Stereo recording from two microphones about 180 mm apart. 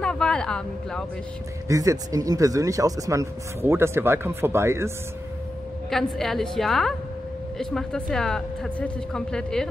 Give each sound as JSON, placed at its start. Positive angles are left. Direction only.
{"t": 0.0, "sound": "a sound", "side_deg": 5}
{"t": 1.7, "sound": "speech", "side_deg": -20}
{"t": 5.9, "sound": "speech", "side_deg": 0}